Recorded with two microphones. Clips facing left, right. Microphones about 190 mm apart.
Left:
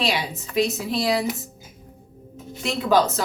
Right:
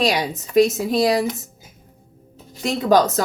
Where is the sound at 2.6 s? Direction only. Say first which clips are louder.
Right 3 dB; 40° right (ahead or behind).